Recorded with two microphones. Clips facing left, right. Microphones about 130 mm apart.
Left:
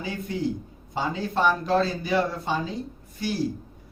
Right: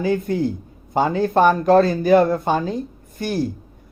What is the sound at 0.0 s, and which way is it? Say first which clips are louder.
Speech: right 9 dB; 50° right (ahead or behind).